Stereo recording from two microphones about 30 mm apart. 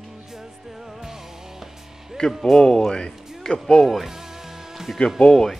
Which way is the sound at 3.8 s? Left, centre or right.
Centre.